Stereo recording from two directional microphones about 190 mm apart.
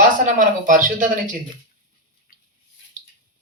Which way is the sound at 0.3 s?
45° right (ahead or behind).